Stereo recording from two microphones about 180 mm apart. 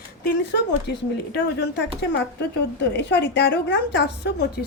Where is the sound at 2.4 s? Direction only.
70° left (ahead or behind).